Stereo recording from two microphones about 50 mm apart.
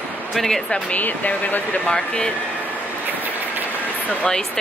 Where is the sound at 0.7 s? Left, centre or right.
Centre.